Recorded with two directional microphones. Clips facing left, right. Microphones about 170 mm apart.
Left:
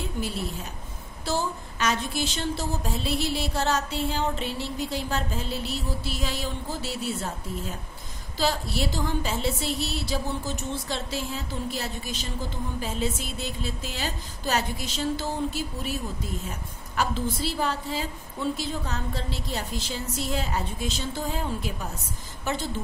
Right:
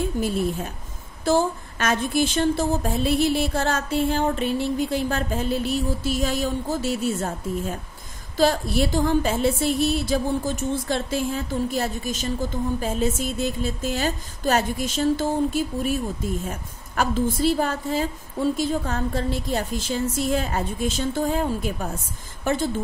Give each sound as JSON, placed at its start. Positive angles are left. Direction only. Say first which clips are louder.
{"t": 0.2, "sound": "a woman's voice", "louder": "right 7 dB", "side_deg": -45}